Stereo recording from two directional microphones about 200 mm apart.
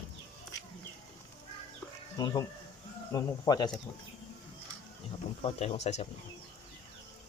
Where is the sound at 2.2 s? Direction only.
20° left (ahead or behind).